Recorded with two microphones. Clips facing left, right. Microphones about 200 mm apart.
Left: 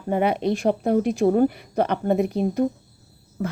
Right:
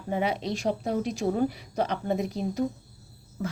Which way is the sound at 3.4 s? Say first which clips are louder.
Left 5 dB; 55° left (ahead or behind).